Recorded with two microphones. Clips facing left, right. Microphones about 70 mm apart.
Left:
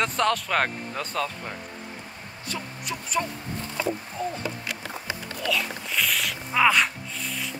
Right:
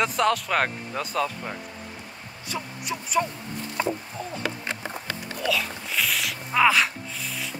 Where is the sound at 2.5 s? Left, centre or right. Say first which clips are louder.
Right 2 dB; centre.